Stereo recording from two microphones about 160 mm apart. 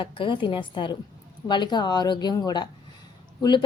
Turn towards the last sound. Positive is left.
turn(degrees=30)  # may be behind; listen again after turning